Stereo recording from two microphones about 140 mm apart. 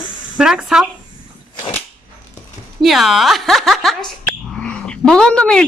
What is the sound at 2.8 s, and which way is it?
A woman's voice, centre (ahead or behind).